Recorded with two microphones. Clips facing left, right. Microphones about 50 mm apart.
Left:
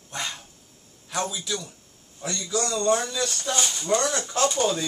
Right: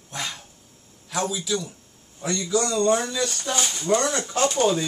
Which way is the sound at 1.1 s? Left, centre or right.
Centre.